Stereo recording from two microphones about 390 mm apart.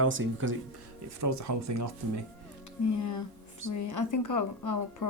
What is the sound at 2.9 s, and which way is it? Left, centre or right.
Speech, left.